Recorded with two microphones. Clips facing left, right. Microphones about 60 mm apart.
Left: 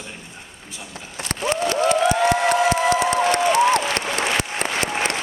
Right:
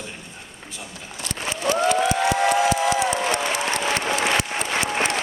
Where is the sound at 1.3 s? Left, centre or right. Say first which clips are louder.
Left 5 dB; left.